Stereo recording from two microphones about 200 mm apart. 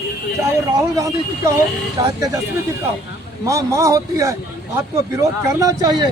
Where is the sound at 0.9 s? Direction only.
15° right (ahead or behind).